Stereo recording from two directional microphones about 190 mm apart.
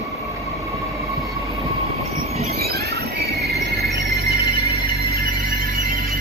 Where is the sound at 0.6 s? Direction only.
15° right (ahead or behind).